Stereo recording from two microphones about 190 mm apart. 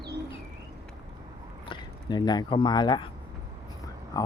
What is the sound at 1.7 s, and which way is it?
Speech, 25° left (ahead or behind).